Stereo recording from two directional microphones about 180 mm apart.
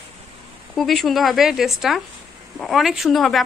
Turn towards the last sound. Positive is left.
turn(degrees=0)  # may be behind; listen again after turning